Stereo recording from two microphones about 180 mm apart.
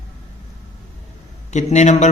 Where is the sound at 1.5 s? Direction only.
40° left (ahead or behind).